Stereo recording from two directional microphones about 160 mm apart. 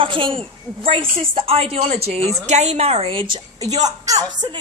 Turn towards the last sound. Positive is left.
turn(degrees=-25)  # may be behind; listen again after turning